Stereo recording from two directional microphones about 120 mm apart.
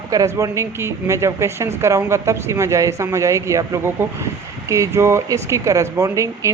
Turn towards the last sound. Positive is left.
turn(degrees=-25)  # may be behind; listen again after turning